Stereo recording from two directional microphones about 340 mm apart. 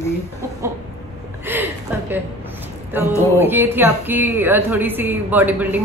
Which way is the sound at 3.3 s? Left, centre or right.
Centre.